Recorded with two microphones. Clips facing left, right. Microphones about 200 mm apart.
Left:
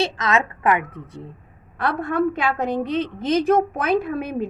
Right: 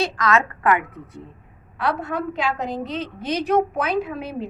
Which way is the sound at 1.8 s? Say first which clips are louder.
Left 4 dB; 50° left (ahead or behind).